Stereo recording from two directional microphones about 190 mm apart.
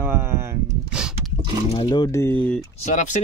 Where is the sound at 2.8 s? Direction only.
40° left (ahead or behind).